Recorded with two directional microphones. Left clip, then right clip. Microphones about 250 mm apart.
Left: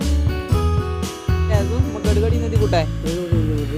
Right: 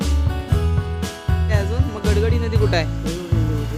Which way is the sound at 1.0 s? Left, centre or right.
Centre.